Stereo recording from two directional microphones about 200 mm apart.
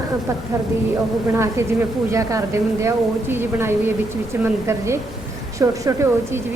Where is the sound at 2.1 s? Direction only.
15° right (ahead or behind).